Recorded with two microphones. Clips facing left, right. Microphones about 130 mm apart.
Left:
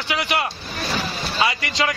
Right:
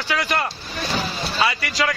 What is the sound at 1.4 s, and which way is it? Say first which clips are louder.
Speech: even; 25° left (ahead or behind).